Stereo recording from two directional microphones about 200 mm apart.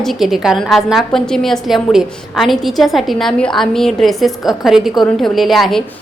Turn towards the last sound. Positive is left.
turn(degrees=0)  # may be behind; listen again after turning